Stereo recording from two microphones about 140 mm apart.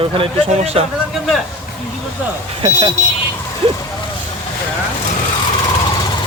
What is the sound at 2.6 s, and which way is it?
Speech, 35° right (ahead or behind).